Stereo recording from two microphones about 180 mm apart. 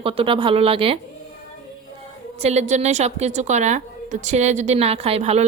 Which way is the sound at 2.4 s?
40° right (ahead or behind).